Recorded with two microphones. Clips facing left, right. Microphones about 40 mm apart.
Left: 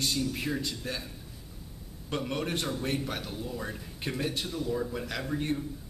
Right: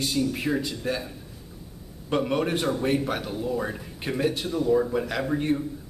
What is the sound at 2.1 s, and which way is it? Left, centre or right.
A man's voice, centre.